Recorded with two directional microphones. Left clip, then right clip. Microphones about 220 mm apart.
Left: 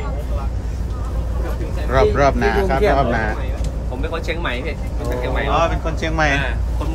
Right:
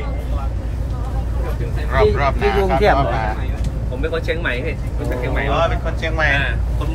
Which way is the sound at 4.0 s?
35° left (ahead or behind).